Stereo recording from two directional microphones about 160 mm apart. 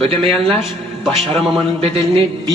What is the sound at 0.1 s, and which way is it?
Speech, 35° right (ahead or behind).